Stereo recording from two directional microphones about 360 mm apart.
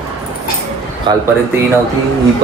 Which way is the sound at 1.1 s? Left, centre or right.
Centre.